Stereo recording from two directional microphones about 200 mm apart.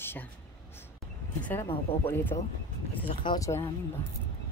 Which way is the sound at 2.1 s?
10° left (ahead or behind).